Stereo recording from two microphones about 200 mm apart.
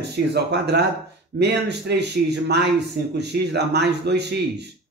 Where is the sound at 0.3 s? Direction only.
55° right (ahead or behind).